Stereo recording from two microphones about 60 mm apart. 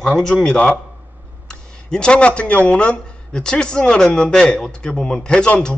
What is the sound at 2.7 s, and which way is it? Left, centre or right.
Speech, centre.